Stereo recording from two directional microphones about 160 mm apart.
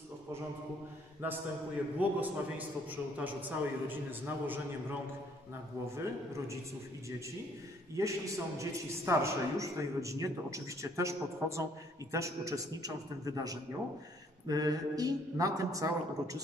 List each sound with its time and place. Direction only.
2.0 s a man's voice: 10° right (ahead or behind)
5.9 s a man's voice: 15° right (ahead or behind)
7.9 s a man's voice: 20° right (ahead or behind)